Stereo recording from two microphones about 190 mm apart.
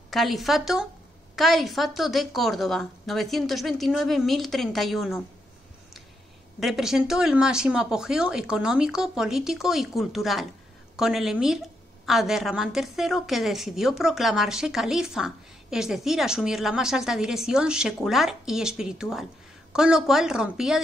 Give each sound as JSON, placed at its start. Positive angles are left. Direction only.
{"t": 0.1, "sound": "a woman's voice", "side_deg": 0}
{"t": 6.6, "sound": "a woman's voice", "side_deg": 0}